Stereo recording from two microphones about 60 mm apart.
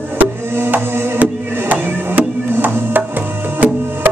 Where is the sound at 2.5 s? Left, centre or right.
Right.